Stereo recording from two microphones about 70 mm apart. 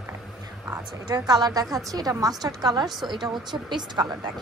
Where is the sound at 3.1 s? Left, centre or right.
Right.